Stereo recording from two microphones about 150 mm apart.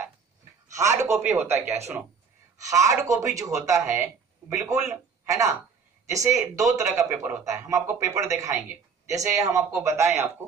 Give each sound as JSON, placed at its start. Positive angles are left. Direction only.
{"t": 0.7, "sound": "a man's voice", "side_deg": -20}